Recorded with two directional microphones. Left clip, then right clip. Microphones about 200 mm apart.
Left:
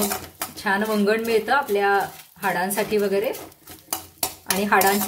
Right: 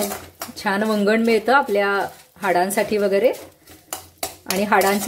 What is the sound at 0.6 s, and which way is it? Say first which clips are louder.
Speech: right 2 dB; 35° right (ahead or behind).